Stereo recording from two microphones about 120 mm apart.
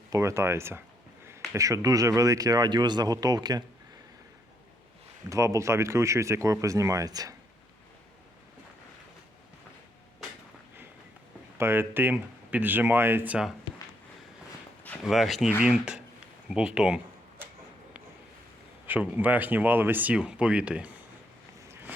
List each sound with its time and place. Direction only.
0.1 s speech: 25° right (ahead or behind)
5.3 s speech: 25° right (ahead or behind)
11.5 s speech: 20° right (ahead or behind)
15.0 s speech: centre (ahead or behind)
18.9 s speech: 15° right (ahead or behind)
21.7 s vehicle: 15° right (ahead or behind)